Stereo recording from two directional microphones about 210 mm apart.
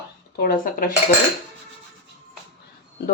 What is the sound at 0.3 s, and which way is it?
Speech, 45° left (ahead or behind).